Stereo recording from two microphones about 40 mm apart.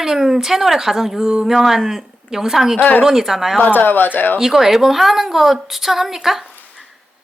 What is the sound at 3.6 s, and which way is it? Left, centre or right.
Speech, left.